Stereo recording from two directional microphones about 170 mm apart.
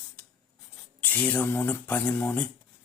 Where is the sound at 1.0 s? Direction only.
10° left (ahead or behind).